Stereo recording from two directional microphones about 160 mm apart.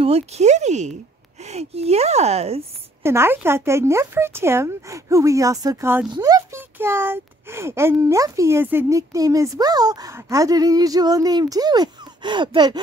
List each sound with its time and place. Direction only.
0.0 s speech: 40° right (ahead or behind)
3.0 s speech: 15° right (ahead or behind)